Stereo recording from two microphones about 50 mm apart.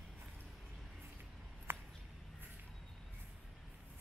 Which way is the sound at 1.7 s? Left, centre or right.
Right.